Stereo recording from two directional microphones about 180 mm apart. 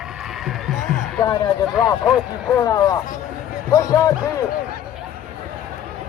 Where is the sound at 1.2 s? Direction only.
20° left (ahead or behind).